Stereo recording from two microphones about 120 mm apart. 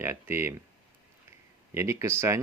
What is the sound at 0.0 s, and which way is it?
Speech, 20° right (ahead or behind).